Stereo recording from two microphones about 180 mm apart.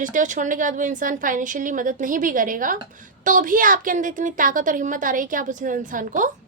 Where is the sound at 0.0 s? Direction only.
45° right (ahead or behind).